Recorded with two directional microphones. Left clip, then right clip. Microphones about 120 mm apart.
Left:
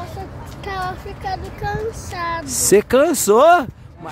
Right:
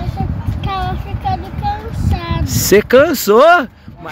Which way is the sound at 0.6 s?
40° left (ahead or behind).